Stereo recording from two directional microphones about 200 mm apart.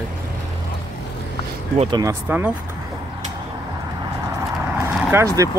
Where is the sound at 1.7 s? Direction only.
30° right (ahead or behind).